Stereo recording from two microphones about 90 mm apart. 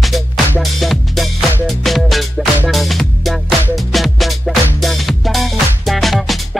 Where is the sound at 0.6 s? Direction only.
Centre (ahead or behind).